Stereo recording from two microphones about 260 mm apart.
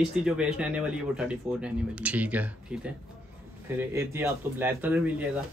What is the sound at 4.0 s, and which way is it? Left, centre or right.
Speech, centre.